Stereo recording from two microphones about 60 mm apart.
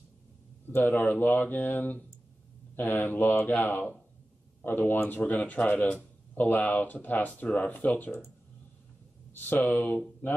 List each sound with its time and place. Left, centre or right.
0.7 s speech: left
9.4 s speech: left